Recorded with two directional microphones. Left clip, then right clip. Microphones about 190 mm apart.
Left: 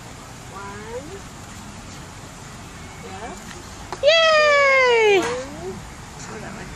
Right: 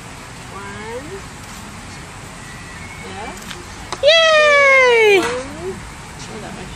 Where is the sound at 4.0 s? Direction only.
Centre (ahead or behind).